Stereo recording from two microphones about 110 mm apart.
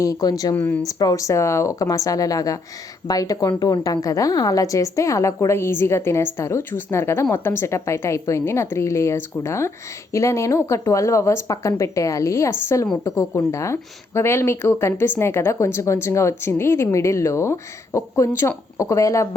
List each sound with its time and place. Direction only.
0.0 s speech: 35° left (ahead or behind)
0.5 s speech: 15° left (ahead or behind)
0.9 s a woman's voice: 35° left (ahead or behind)